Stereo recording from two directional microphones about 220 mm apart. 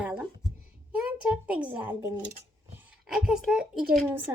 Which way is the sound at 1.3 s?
5° right (ahead or behind).